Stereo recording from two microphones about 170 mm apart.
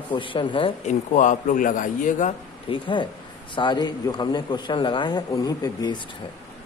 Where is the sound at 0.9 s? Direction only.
50° left (ahead or behind).